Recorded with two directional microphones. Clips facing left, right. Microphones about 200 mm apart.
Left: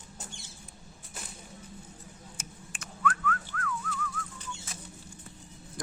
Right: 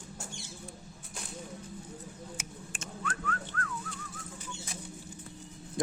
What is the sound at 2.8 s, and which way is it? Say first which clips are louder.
Whistling: left 7 dB; 30° right (ahead or behind).